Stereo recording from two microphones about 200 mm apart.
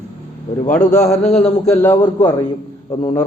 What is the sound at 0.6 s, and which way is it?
Speech, 40° left (ahead or behind).